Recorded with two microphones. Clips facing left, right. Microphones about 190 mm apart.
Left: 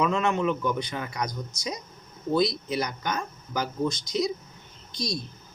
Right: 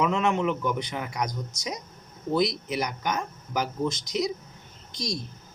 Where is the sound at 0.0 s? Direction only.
15° right (ahead or behind).